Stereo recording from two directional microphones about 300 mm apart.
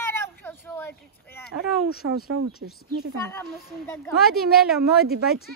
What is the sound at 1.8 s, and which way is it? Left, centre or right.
Speech, left.